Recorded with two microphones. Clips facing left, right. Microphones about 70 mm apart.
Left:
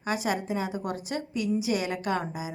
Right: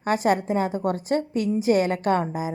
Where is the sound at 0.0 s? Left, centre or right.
Right.